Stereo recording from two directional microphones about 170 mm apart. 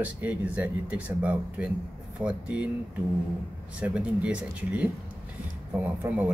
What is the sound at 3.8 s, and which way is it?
Speech, 5° right (ahead or behind).